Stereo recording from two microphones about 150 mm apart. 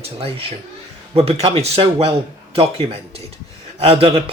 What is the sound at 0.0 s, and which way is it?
Speech, 40° right (ahead or behind).